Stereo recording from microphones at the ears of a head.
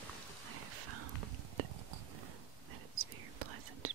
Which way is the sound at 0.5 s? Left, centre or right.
Right.